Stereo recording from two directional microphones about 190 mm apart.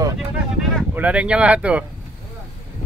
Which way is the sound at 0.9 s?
5° right (ahead or behind).